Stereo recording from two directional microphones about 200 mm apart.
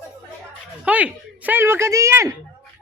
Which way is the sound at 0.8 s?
5° right (ahead or behind).